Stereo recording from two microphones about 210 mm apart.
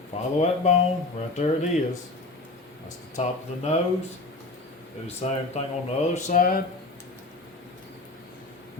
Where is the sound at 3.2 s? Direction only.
30° left (ahead or behind).